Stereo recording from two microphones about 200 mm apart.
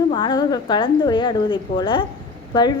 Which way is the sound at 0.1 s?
20° left (ahead or behind).